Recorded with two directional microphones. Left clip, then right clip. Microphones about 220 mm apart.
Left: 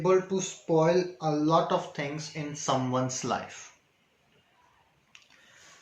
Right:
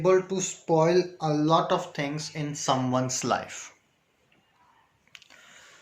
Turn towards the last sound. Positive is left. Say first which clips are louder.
# right 5 dB
turn(degrees=-55)  # may be behind; listen again after turning